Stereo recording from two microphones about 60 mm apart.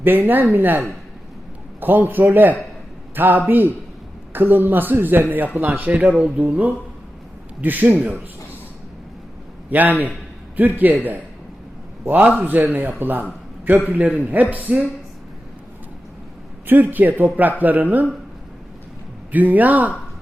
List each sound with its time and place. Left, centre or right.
0.0 s a man's voice: right
5.9 s a man's voice: right
9.6 s a man's voice: right
12.0 s a man's voice: right
16.6 s a man's voice: right
19.3 s speech: right